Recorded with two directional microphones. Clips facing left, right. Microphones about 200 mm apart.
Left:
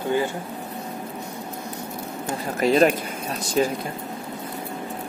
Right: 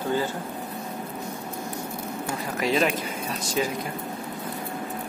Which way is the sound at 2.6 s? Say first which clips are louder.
Left 6 dB; 45° left (ahead or behind).